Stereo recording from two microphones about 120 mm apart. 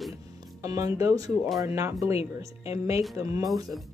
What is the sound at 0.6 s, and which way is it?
Speech, 30° right (ahead or behind).